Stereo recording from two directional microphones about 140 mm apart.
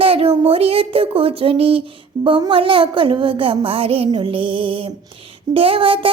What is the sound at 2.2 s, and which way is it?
A child's voice, 40° right (ahead or behind).